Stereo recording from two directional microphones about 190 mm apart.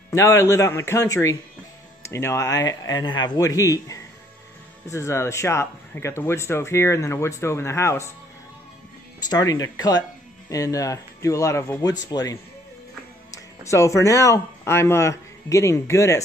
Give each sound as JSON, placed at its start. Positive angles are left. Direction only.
{"t": 0.1, "sound": "speech", "side_deg": 15}
{"t": 9.2, "sound": "speech", "side_deg": 20}